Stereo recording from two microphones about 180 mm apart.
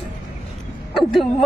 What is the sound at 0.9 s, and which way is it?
Speech, centre (ahead or behind).